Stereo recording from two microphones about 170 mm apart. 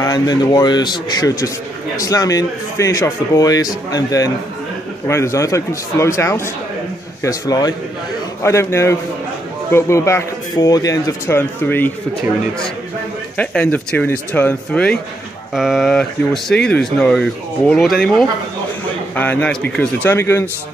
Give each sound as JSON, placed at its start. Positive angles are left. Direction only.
{"t": 0.0, "sound": "a man's voice", "side_deg": 20}
{"t": 13.4, "sound": "speech", "side_deg": 5}